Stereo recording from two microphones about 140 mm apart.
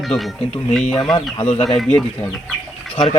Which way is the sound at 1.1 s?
45° left (ahead or behind).